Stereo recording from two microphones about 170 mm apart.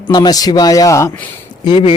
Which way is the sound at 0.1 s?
25° left (ahead or behind).